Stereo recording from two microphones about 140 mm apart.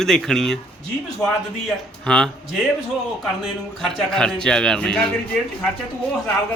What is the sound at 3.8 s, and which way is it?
Speech, 5° left (ahead or behind).